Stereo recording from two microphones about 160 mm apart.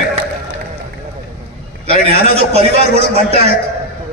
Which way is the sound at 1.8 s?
40° right (ahead or behind).